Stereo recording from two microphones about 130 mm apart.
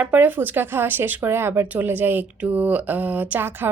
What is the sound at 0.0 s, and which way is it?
Speech, 15° right (ahead or behind).